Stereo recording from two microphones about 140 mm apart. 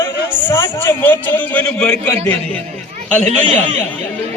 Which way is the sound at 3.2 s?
50° right (ahead or behind).